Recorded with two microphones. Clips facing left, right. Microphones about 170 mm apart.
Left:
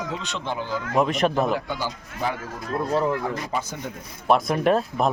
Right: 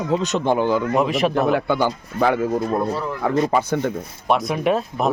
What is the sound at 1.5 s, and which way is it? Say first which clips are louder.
Speech: right 8 dB; 65° right (ahead or behind).